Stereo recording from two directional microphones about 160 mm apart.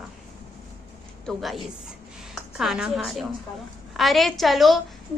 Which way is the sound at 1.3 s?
Centre (ahead or behind).